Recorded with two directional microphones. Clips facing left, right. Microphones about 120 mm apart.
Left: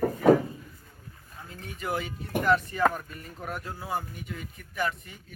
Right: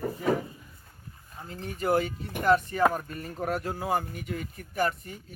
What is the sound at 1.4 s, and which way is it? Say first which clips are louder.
Speech: right 5 dB; 30° right (ahead or behind).